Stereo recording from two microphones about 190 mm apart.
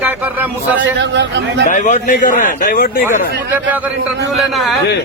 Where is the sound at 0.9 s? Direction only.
65° right (ahead or behind).